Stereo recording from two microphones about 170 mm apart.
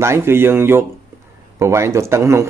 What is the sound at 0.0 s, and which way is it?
A man's voice, 15° right (ahead or behind).